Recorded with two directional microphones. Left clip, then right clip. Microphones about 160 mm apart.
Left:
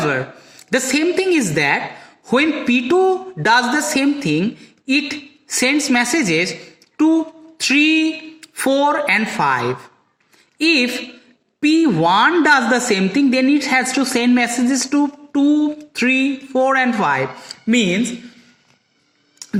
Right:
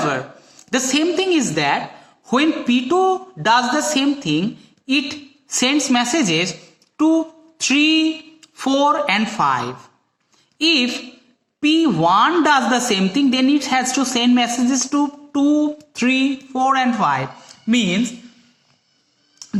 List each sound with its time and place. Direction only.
0.0 s a woman's voice: 25° left (ahead or behind)
6.9 s a sound: 25° left (ahead or behind)
10.6 s a woman's voice: 25° left (ahead or behind)